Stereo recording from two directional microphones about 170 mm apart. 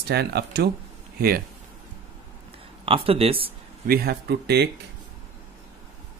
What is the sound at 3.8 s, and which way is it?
Speech, 65° right (ahead or behind).